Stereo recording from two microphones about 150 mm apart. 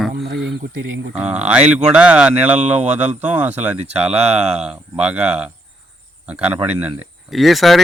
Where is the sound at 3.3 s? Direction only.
10° right (ahead or behind).